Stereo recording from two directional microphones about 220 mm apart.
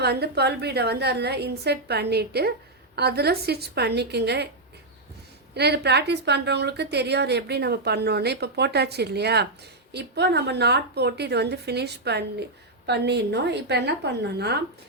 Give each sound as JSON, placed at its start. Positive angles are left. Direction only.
{"t": 0.0, "sound": "a woman's voice", "side_deg": -45}
{"t": 5.5, "sound": "a woman's voice", "side_deg": -50}